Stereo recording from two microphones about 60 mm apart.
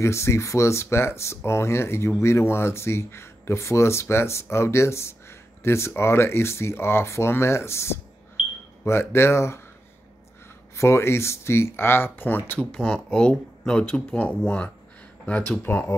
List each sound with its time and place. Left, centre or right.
0.0 s speech: left
10.8 s speech: left
12.5 s speech: centre